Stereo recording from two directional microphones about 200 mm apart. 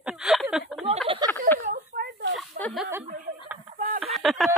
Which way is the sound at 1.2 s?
20° right (ahead or behind).